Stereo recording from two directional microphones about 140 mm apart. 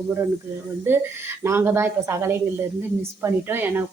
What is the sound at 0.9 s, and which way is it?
Speech, 15° right (ahead or behind).